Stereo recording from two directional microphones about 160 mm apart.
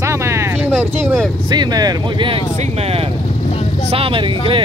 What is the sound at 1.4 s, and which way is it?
Speech, 25° right (ahead or behind).